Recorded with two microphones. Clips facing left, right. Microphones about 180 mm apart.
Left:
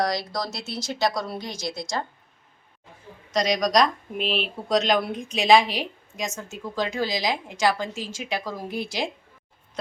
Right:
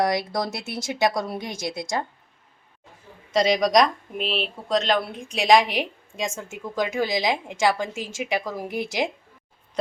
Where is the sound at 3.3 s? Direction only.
25° right (ahead or behind).